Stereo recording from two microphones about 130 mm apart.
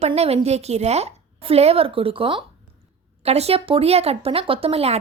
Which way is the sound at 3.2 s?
50° right (ahead or behind).